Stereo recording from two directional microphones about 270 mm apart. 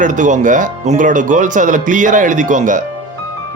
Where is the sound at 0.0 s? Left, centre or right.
Right.